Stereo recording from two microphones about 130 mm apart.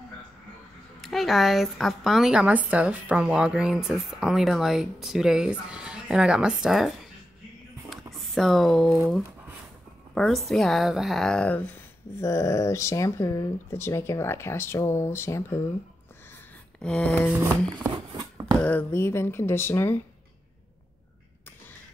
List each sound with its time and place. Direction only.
1.0 s speech: centre (ahead or behind)
7.9 s a sound: centre (ahead or behind)
10.1 s speech: centre (ahead or behind); by 15.6 s 20° left (ahead or behind)
16.8 s speech: 5° left (ahead or behind)
18.6 s speech: 15° left (ahead or behind)